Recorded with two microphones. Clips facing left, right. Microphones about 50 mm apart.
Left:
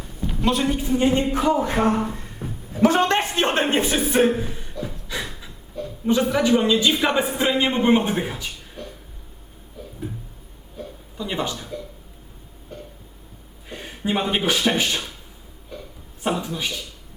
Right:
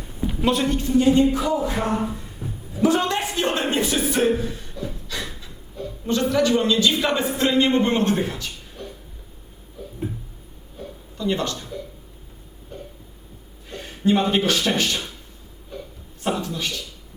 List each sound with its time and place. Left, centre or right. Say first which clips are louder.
0.3 s a woman's voice: even; centre
0.9 s music: right 4 dB; left
2.4 s a sound: left 2 dB; left
2.8 s a man's voice: left 2 dB; left; by 8.4 s centre
11.2 s a man's voice: right 2 dB; centre
13.7 s speech: right 5 dB; centre
16.2 s a man's voice: even; centre